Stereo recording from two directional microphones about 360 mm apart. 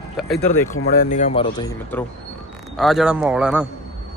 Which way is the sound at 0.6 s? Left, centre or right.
Left.